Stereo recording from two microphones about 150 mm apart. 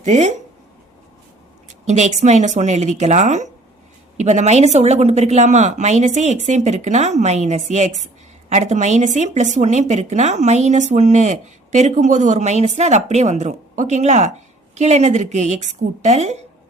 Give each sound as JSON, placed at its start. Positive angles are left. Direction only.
{"t": 0.0, "sound": "a woman's voice", "side_deg": -50}
{"t": 1.9, "sound": "a woman's voice", "side_deg": -50}